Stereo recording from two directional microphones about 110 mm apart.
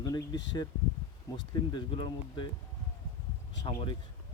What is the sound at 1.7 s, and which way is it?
Speech, 45° left (ahead or behind).